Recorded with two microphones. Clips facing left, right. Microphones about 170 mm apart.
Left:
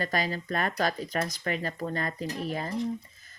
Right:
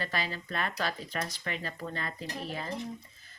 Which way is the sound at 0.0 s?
45° left (ahead or behind).